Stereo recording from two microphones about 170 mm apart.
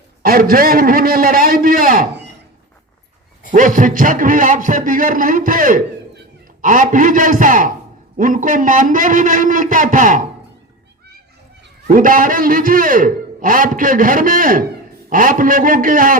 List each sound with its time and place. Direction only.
0.2 s a man's voice: 60° right (ahead or behind)
3.5 s a man's voice: 50° right (ahead or behind)
11.9 s a man's voice: 55° right (ahead or behind)